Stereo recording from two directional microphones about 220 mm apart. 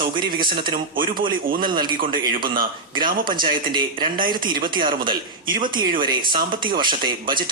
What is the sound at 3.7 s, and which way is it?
Speech, 20° right (ahead or behind).